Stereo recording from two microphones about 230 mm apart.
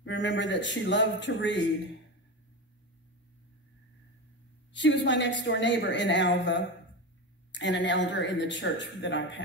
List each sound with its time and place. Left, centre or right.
0.0 s a woman's voice: left
4.7 s a woman's voice: left